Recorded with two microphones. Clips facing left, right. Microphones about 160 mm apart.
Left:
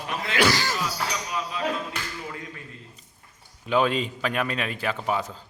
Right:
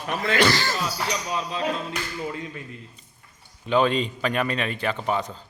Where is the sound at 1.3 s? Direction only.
30° right (ahead or behind).